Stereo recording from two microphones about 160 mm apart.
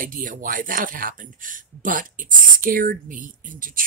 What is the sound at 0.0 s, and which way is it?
Speech, 60° right (ahead or behind).